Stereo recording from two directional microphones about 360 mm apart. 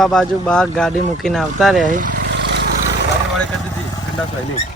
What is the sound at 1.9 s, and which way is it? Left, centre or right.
Vehicle, right.